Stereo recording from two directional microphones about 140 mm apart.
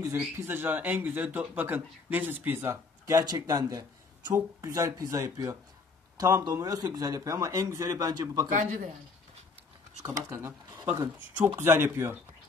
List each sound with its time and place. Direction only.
0.4 s speech: 15° right (ahead or behind)
8.5 s speech: 65° right (ahead or behind)
10.0 s speech: 20° right (ahead or behind)